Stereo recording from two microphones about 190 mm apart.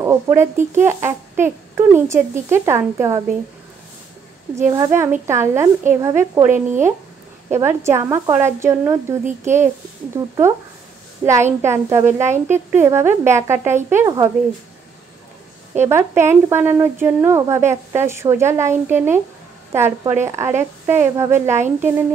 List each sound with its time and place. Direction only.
0.0 s speech: 15° right (ahead or behind)
4.7 s speech: 15° right (ahead or behind)
15.7 s speech: 15° right (ahead or behind)